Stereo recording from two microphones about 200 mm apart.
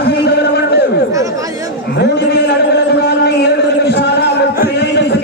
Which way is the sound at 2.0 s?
55° left (ahead or behind).